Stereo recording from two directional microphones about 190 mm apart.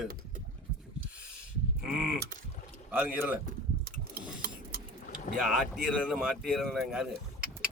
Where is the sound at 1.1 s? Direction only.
5° right (ahead or behind).